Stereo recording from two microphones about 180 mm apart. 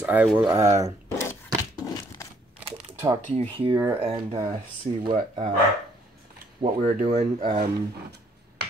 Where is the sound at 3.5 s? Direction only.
30° right (ahead or behind).